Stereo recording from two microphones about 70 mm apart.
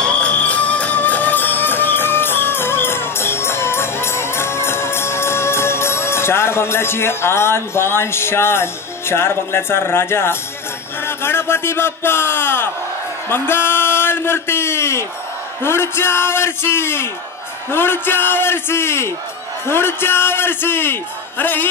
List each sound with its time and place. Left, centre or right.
0.0 s music: centre; by 10.3 s left
11.1 s a man's voice: left